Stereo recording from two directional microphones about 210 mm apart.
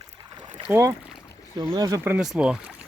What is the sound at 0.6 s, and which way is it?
Speech, 10° right (ahead or behind).